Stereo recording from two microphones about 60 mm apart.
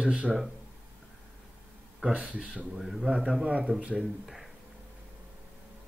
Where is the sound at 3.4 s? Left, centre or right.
Right.